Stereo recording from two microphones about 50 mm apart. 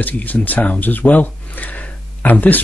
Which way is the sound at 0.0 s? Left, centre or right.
Left.